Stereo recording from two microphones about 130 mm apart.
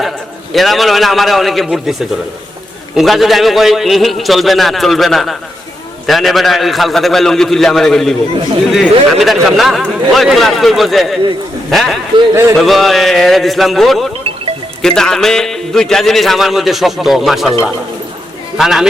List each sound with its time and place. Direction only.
0.5 s a man's voice: centre (ahead or behind)
12.3 s speech: 20° right (ahead or behind)
12.5 s a man's voice: centre (ahead or behind)
18.5 s a man's voice: 5° right (ahead or behind)